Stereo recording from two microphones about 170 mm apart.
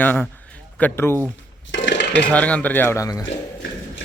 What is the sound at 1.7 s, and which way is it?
Dishes, 90° left.